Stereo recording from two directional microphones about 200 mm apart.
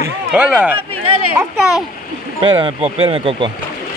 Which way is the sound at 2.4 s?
25° right (ahead or behind).